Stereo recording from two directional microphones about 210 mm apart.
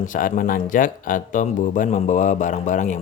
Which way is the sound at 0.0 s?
40° left (ahead or behind).